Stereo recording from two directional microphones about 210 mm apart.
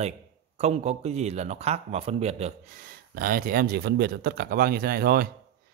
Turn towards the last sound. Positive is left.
turn(degrees=-45)  # may be behind; listen again after turning